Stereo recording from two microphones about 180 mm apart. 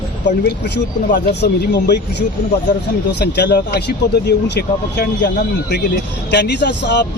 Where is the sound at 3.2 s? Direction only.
70° left (ahead or behind).